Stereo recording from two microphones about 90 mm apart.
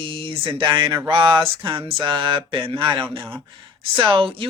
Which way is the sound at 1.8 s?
60° right (ahead or behind).